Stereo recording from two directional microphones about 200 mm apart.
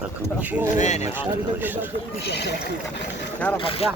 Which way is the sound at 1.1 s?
10° right (ahead or behind).